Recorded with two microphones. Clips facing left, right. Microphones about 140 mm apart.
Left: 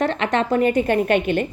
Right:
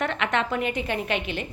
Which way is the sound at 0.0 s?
35° left (ahead or behind).